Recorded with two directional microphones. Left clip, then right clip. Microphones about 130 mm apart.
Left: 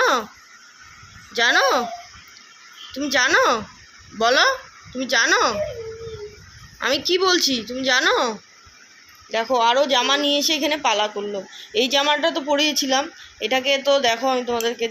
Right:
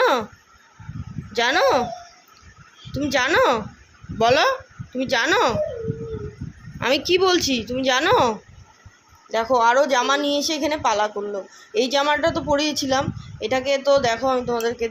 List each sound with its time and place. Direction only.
0.0 s a sound: 20° right (ahead or behind)
1.3 s speech: 20° right (ahead or behind)
2.9 s speech: 15° right (ahead or behind)
6.7 s a woman's voice: 20° right (ahead or behind); by 14.8 s centre (ahead or behind)